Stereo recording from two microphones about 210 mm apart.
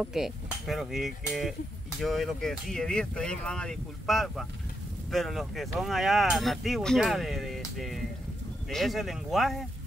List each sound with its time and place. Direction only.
0.0 s speech: centre (ahead or behind)